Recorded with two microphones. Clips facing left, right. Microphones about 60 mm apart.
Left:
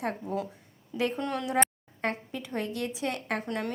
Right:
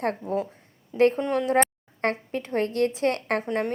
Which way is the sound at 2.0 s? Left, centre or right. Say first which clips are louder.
Right 6 dB; right.